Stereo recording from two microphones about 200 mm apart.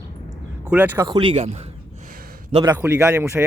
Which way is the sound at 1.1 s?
25° right (ahead or behind).